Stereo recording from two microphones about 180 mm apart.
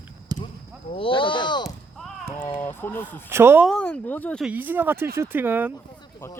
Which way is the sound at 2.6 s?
10° left (ahead or behind).